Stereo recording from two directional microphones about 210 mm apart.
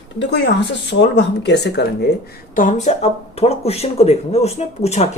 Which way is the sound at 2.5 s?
35° left (ahead or behind).